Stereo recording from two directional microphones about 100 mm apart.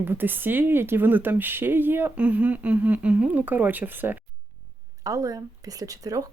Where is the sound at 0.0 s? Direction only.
20° right (ahead or behind).